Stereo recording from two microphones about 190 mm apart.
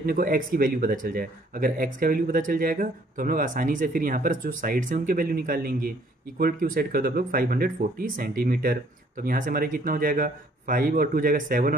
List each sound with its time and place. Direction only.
0.0 s speech: 50° right (ahead or behind)